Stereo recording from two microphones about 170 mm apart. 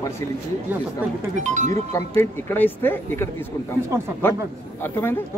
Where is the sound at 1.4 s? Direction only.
45° right (ahead or behind).